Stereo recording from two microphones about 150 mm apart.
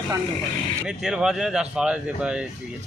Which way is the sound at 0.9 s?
5° right (ahead or behind).